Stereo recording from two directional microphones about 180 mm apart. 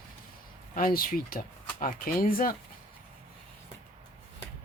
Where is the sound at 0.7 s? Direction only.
50° left (ahead or behind).